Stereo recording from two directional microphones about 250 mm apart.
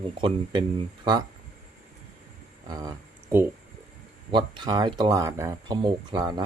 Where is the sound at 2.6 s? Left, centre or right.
Centre.